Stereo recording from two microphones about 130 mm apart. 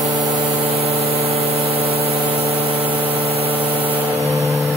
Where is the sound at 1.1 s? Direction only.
50° right (ahead or behind).